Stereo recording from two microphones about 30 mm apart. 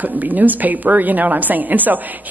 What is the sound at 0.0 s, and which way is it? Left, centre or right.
A woman's voice, right.